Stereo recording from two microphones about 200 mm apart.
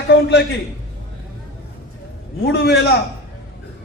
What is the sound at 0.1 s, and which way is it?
Speech, 60° left (ahead or behind).